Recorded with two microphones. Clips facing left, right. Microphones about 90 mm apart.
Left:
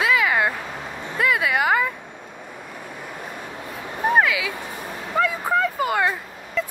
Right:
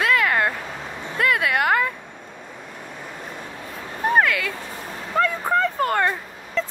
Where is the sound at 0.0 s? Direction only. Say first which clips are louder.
Even; 5° left (ahead or behind).